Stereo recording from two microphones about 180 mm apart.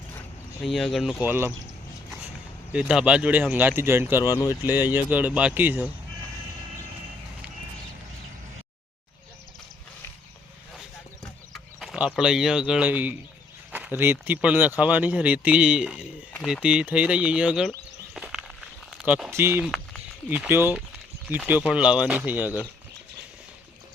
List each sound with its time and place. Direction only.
0.6 s speech: centre (ahead or behind)
1.2 s speech: 10° right (ahead or behind)
2.7 s speech: 5° right (ahead or behind)
4.2 s speech: 15° left (ahead or behind)
4.6 s speech: 10° right (ahead or behind)
11.5 s speech: centre (ahead or behind)
16.6 s speech: 5° right (ahead or behind)
18.1 s walk: 5° right (ahead or behind)
18.9 s speech: 5° right (ahead or behind)